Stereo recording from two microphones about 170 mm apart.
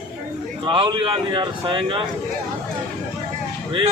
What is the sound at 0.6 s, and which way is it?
A man's voice, 30° right (ahead or behind).